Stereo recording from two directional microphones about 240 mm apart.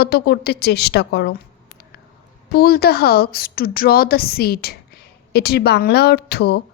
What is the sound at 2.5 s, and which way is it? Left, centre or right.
A woman's voice, left.